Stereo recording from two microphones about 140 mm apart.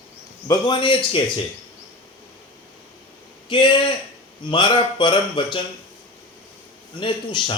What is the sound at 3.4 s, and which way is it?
Speech, 35° left (ahead or behind).